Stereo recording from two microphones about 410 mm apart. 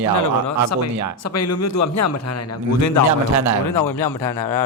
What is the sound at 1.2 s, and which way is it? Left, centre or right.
A man's voice, left.